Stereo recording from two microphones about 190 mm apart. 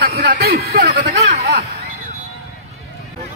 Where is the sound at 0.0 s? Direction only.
55° right (ahead or behind).